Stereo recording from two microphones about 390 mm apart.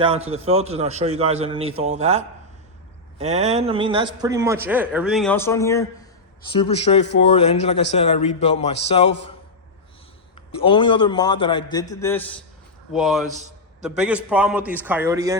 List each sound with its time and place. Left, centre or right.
0.0 s a man's voice: centre
10.6 s a man's voice: centre